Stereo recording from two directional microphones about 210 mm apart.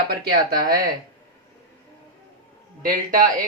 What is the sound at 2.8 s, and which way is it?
Speech, 40° right (ahead or behind).